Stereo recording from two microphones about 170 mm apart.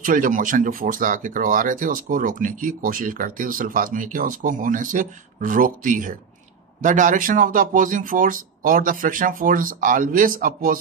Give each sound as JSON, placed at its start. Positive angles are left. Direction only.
{"t": 0.0, "sound": "speech", "side_deg": -50}